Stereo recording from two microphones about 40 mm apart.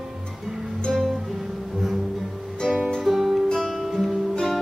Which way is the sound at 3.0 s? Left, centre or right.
Centre.